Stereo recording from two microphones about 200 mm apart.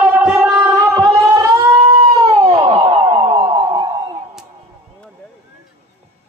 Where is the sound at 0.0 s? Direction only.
5° right (ahead or behind).